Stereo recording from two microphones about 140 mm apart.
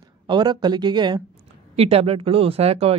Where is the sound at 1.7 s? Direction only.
45° right (ahead or behind).